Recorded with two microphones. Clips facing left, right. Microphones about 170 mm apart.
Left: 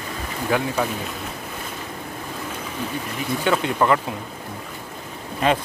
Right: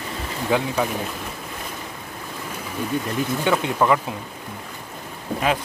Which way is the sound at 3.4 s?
15° right (ahead or behind).